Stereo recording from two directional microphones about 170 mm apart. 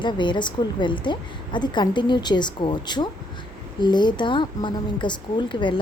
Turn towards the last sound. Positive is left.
turn(degrees=30)  # may be behind; listen again after turning